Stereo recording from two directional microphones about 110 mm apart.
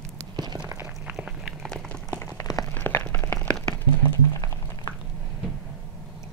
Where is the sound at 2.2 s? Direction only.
30° left (ahead or behind).